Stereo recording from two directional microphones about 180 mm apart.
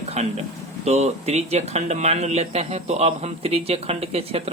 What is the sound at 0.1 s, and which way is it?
Speech, 35° right (ahead or behind).